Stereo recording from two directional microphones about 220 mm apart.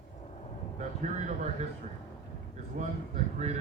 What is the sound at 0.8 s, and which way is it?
Speech, 35° right (ahead or behind).